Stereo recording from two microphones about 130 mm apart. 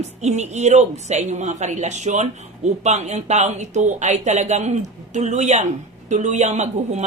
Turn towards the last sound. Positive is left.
turn(degrees=-60)  # may be behind; listen again after turning